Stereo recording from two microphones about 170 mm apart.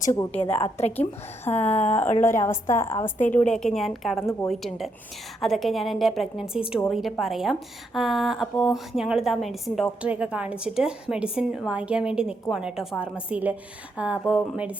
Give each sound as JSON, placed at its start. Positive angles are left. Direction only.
{"t": 0.1, "sound": "a woman's voice", "side_deg": 20}
{"t": 0.4, "sound": "a woman's voice", "side_deg": 35}
{"t": 1.5, "sound": "a woman's voice", "side_deg": 10}
{"t": 4.2, "sound": "a woman's voice", "side_deg": 15}
{"t": 4.4, "sound": "a woman's voice", "side_deg": 0}